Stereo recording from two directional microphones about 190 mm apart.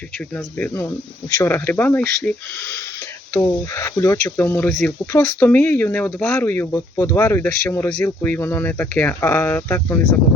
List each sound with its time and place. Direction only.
0.3 s speech: 15° left (ahead or behind)
3.3 s speech: 10° left (ahead or behind)